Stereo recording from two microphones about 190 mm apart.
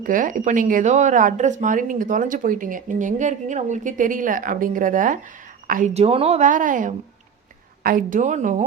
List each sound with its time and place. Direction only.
0.0 s a woman's voice: 45° right (ahead or behind)
5.9 s a woman's voice: 30° right (ahead or behind)